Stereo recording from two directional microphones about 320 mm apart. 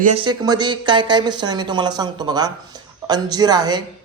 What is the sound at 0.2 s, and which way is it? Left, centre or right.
Speech, centre.